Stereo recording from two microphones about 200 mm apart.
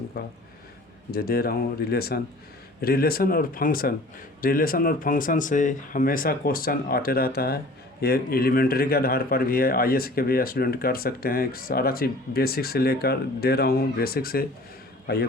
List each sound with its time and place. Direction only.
0.1 s a man's voice: 50° left (ahead or behind)